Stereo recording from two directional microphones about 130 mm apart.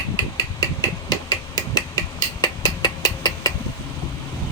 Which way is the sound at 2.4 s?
35° left (ahead or behind).